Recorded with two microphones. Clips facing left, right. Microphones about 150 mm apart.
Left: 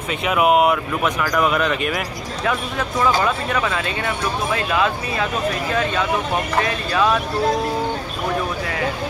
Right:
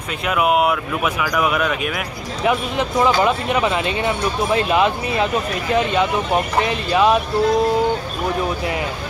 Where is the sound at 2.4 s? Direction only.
20° right (ahead or behind).